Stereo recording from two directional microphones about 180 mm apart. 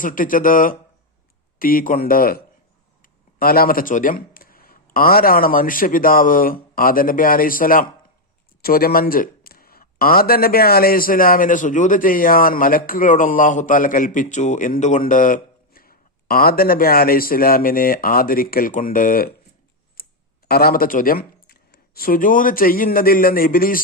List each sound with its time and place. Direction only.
0.0 s speech: 50° left (ahead or behind)
20.5 s speech: 55° left (ahead or behind)